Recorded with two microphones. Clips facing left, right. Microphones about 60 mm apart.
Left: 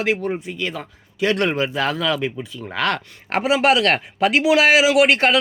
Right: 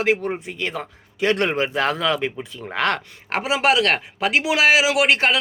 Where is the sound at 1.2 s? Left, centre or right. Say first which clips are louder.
Left 1 dB; right.